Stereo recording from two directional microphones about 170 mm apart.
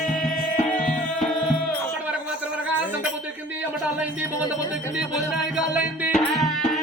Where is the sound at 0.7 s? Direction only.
5° left (ahead or behind).